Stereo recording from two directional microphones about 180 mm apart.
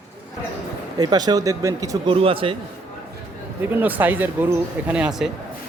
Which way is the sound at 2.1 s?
30° right (ahead or behind).